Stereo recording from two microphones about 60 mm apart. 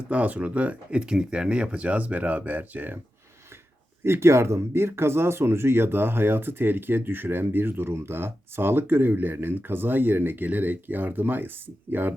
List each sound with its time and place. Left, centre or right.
0.1 s speech: right
4.0 s speech: right